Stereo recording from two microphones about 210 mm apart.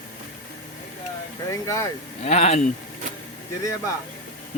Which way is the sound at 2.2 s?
30° left (ahead or behind).